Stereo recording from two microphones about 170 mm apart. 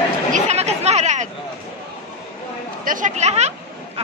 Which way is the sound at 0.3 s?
40° right (ahead or behind).